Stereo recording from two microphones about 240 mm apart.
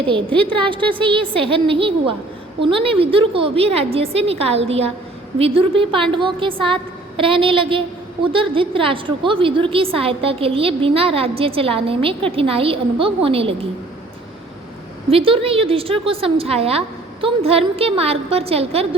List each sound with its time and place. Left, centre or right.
0.1 s a woman's voice: right
15.1 s a woman's voice: right